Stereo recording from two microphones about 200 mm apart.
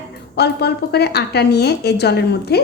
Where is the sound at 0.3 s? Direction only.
55° left (ahead or behind).